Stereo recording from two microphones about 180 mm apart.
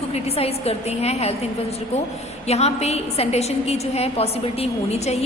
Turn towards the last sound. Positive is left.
turn(degrees=35)  # may be behind; listen again after turning